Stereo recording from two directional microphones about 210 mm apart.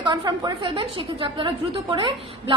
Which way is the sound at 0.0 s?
20° right (ahead or behind).